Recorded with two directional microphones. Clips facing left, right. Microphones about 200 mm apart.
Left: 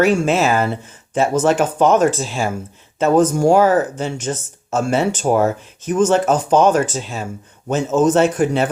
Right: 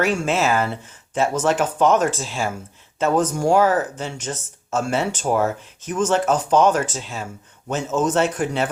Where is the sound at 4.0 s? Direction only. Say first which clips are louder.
Left 6 dB; 45° left (ahead or behind).